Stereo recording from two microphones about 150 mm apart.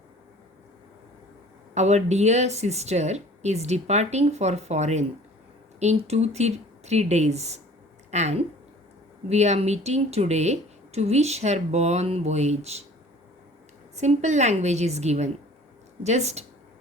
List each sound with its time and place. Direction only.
1.7 s speech: 50° right (ahead or behind)
6.1 s speech: 45° right (ahead or behind)
13.9 s speech: 50° right (ahead or behind)